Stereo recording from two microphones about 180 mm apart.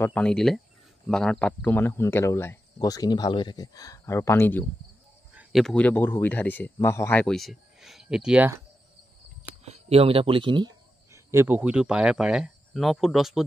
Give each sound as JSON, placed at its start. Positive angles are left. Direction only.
{"t": 0.0, "sound": "speech", "side_deg": 5}
{"t": 5.3, "sound": "speech", "side_deg": -5}
{"t": 9.7, "sound": "speech", "side_deg": -35}
{"t": 11.1, "sound": "speech", "side_deg": -15}